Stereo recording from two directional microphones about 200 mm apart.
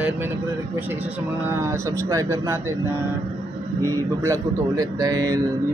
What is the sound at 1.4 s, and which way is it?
Speech, 10° right (ahead or behind).